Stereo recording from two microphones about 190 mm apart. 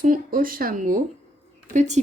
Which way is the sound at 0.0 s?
45° right (ahead or behind).